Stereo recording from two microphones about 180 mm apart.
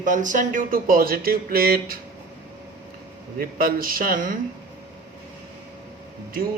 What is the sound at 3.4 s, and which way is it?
Speech, 50° right (ahead or behind).